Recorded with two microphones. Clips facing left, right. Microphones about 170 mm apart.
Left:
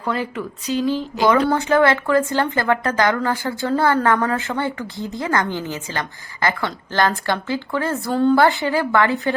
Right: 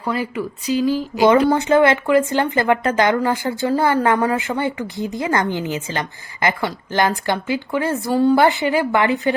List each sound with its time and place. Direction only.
0.0 s speech: 10° right (ahead or behind)